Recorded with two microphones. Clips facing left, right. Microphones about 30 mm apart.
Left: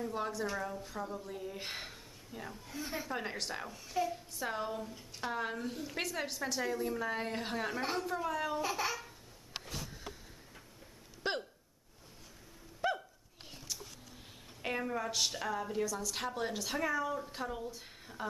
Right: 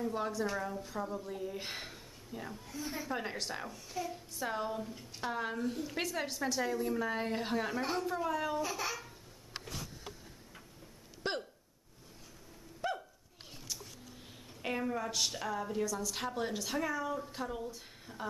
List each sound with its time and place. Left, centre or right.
0.0 s a woman's voice: centre
2.7 s a woman's voice: centre
3.0 s a woman's voice: centre
3.7 s a woman's voice: centre
8.5 s babbling: centre
11.3 s hiccup: centre
12.8 s a sound: centre
14.6 s a woman's voice: centre